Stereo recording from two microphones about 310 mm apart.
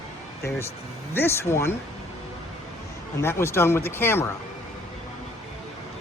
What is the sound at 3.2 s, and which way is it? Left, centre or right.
Speech, centre.